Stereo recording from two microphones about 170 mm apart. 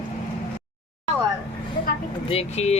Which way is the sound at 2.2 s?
40° left (ahead or behind).